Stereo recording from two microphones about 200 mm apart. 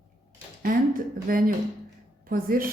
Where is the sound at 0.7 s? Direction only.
45° right (ahead or behind).